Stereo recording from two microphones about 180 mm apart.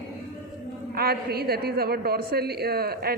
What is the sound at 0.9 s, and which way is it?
A woman's voice, 60° right (ahead or behind).